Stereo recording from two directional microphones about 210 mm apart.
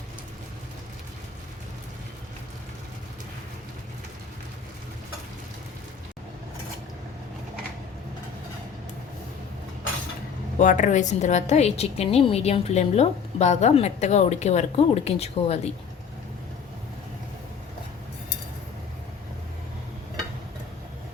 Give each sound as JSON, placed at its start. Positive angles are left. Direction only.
{"t": 10.6, "sound": "a woman's voice", "side_deg": 35}